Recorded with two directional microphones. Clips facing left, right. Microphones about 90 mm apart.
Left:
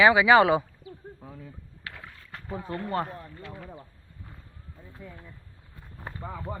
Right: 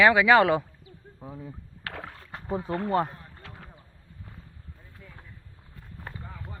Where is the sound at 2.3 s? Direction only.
25° right (ahead or behind).